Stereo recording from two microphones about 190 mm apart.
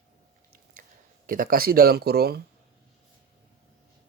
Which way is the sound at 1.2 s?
45° right (ahead or behind).